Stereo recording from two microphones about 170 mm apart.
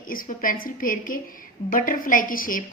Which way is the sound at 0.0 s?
55° left (ahead or behind).